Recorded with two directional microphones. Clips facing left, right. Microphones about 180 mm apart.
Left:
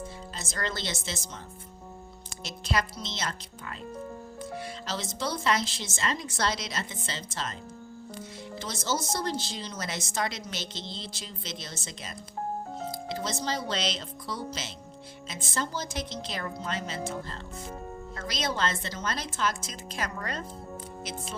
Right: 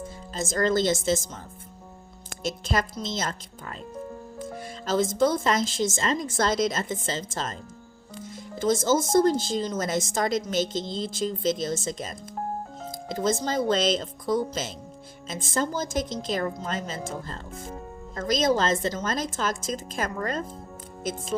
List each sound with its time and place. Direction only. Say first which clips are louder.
0.3 s speech: right 12 dB; 45° right (ahead or behind)
2.4 s speech: right 4 dB; 50° right (ahead or behind)
8.5 s speech: right 10 dB; 50° right (ahead or behind)